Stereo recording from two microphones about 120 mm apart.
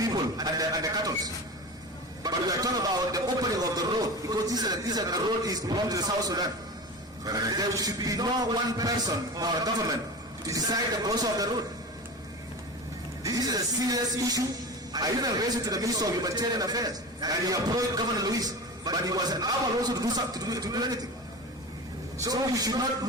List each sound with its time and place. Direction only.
0.0 s a sound: 30° right (ahead or behind)
2.2 s a man's voice: 30° right (ahead or behind)
13.2 s speech: 30° right (ahead or behind)
22.2 s speech: 30° right (ahead or behind)